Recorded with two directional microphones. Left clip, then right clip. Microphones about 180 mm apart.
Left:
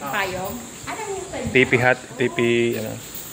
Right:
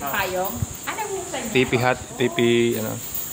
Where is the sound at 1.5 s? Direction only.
5° right (ahead or behind).